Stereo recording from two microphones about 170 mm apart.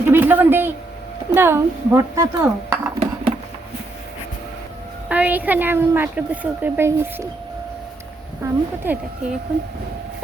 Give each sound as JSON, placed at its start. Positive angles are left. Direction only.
{"t": 0.1, "sound": "a man's voice", "side_deg": -10}
{"t": 3.3, "sound": "a sound", "side_deg": -35}
{"t": 5.0, "sound": "speech", "side_deg": -10}
{"t": 8.4, "sound": "speech", "side_deg": -10}